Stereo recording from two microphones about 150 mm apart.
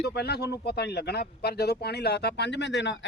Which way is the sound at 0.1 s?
90° left.